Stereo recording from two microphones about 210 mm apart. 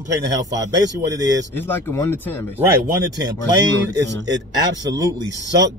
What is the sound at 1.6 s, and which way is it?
Speech, 10° left (ahead or behind).